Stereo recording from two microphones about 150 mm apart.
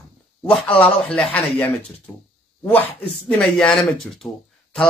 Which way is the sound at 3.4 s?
5° left (ahead or behind).